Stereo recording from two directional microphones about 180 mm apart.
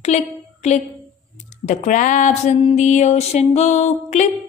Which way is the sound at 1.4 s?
40° left (ahead or behind).